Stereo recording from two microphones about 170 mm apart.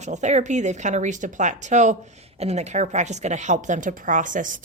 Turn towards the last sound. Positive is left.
turn(degrees=-50)  # may be behind; listen again after turning